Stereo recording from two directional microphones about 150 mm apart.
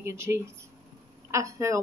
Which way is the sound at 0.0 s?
15° right (ahead or behind).